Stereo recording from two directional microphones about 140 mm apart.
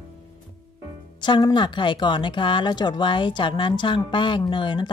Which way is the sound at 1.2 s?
35° left (ahead or behind).